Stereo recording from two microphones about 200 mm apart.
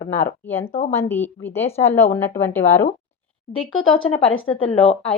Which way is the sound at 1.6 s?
30° left (ahead or behind).